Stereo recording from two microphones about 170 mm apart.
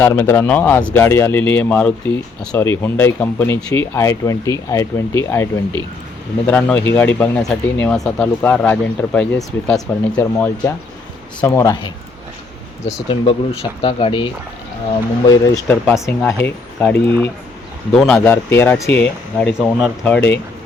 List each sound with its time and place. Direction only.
0.0 s speech: 15° left (ahead or behind)
13.1 s speech: 30° left (ahead or behind)
15.3 s speech: 15° left (ahead or behind)